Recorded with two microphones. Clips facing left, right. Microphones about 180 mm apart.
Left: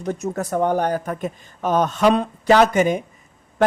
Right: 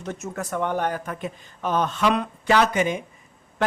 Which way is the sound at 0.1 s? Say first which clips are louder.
Left 6 dB; 35° left (ahead or behind).